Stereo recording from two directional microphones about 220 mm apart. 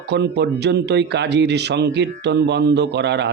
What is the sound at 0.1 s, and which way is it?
Speech, 50° right (ahead or behind).